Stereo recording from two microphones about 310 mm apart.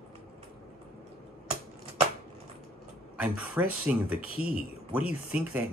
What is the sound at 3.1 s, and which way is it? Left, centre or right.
Speech, centre.